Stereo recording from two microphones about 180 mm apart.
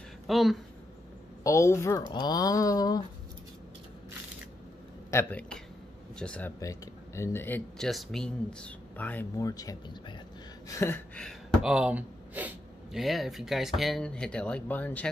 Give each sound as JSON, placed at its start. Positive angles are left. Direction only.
{"t": 0.3, "sound": "speech", "side_deg": 0}
{"t": 1.4, "sound": "speech", "side_deg": 15}
{"t": 5.1, "sound": "speech", "side_deg": 10}
{"t": 6.6, "sound": "speech", "side_deg": 15}
{"t": 11.1, "sound": "speech", "side_deg": 0}